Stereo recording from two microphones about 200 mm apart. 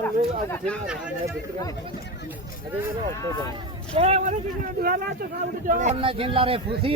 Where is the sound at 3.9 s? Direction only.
30° right (ahead or behind).